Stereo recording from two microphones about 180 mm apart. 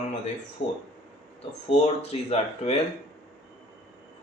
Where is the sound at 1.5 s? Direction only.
35° left (ahead or behind).